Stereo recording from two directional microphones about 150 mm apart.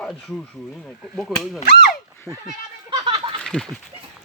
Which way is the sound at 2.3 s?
20° right (ahead or behind).